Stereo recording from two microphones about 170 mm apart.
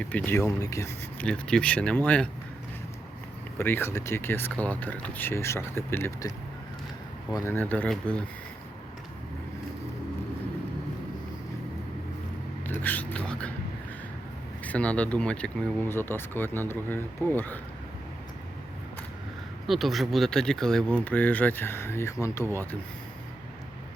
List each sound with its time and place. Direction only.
0.0 s speech: 10° left (ahead or behind)
1.3 s speech: 5° left (ahead or behind)
3.6 s speech: 15° left (ahead or behind)
7.3 s speech: 15° left (ahead or behind)
12.8 s a sound: 10° left (ahead or behind)
14.6 s speech: 10° left (ahead or behind)
19.6 s speech: centre (ahead or behind); by 22.4 s 15° left (ahead or behind)